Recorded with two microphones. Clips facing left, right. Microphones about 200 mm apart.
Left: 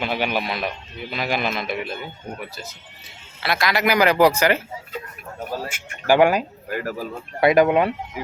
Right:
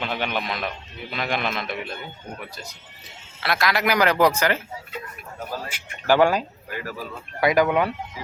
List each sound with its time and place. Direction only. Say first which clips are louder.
0.0 s speech: left 3 dB; 10° left (ahead or behind)
3.4 s speech: left 1 dB; centre (ahead or behind)
6.1 s speech: left 2 dB; 15° left (ahead or behind)
6.7 s speech: left 6 dB; 45° left (ahead or behind)
7.4 s speech: left 4 dB; 25° left (ahead or behind)